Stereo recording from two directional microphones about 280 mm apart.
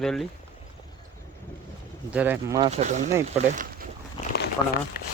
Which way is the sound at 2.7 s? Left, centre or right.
Right.